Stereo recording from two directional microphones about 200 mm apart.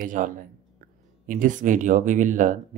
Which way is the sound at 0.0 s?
40° right (ahead or behind).